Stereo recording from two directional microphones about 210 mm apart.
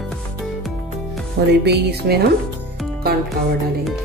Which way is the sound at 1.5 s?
50° right (ahead or behind).